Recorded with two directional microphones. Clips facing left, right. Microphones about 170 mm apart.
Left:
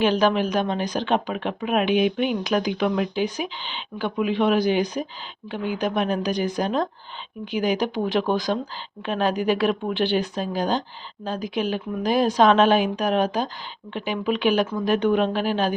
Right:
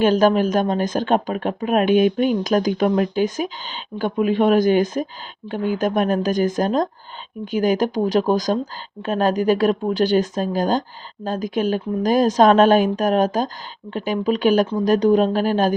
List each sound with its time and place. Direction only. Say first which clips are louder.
0.0 s speech: right 4 dB; 45° right (ahead or behind)